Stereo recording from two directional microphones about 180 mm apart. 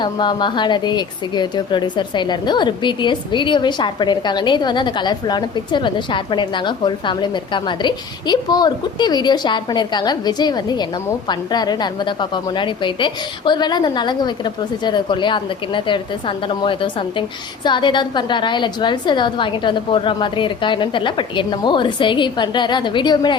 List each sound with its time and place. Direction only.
0.0 s a woman's voice: 25° left (ahead or behind)